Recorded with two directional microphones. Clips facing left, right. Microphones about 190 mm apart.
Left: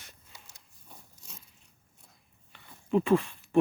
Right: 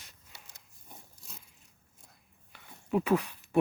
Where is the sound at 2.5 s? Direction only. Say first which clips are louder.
Left 3 dB; 5° right (ahead or behind).